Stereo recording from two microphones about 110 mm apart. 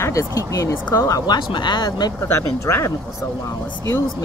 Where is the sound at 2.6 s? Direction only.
25° left (ahead or behind).